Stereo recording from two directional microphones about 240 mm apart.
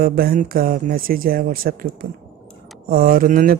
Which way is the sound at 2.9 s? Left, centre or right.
Right.